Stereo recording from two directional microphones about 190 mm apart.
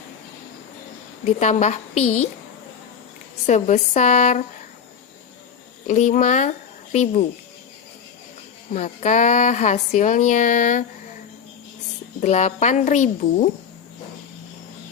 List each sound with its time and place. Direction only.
1.2 s speech: 40° left (ahead or behind)
3.4 s speech: 40° left (ahead or behind)
5.9 s speech: 40° left (ahead or behind)
8.7 s speech: 35° left (ahead or behind)
12.2 s speech: 35° left (ahead or behind)